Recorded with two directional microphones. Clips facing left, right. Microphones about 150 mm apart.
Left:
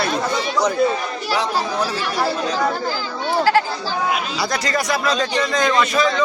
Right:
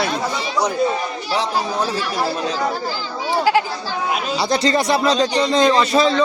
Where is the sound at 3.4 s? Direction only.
15° right (ahead or behind).